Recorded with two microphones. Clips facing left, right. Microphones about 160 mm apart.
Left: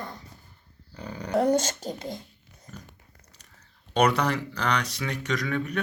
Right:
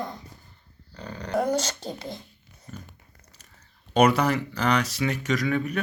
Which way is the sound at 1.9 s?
45° left (ahead or behind).